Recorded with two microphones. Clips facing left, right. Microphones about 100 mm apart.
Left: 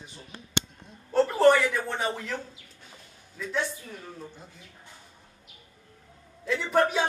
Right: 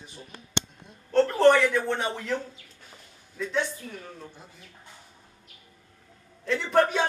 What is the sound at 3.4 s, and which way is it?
Speech, 5° left (ahead or behind).